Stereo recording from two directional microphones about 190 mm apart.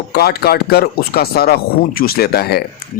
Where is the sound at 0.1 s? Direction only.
55° left (ahead or behind).